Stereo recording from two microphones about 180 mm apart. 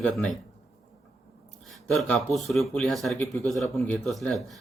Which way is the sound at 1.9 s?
Centre (ahead or behind).